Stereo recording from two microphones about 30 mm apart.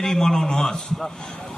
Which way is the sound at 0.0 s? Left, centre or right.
Centre.